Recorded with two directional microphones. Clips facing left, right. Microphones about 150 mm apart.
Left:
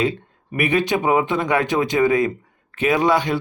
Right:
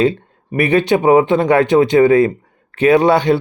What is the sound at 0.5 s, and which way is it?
Speech, 35° right (ahead or behind).